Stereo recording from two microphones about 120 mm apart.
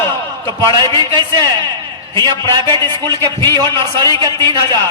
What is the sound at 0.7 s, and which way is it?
Speech, 35° right (ahead or behind).